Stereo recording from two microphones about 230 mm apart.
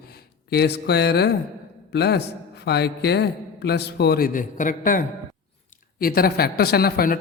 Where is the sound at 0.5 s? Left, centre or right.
Left.